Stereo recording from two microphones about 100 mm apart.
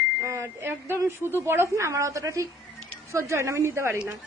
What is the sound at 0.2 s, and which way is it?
A woman's voice, 25° right (ahead or behind).